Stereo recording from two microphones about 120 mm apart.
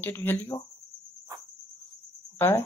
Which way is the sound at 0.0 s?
15° left (ahead or behind).